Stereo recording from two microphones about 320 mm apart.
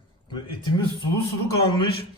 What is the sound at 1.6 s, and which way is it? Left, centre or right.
Speech, centre.